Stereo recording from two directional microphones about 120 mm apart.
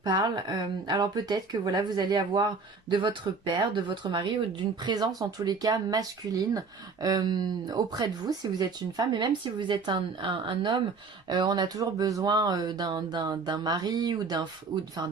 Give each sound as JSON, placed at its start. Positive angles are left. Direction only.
{"t": 0.0, "sound": "speech", "side_deg": -35}